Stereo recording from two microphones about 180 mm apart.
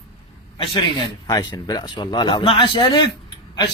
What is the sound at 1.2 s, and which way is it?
A man's voice, 20° left (ahead or behind).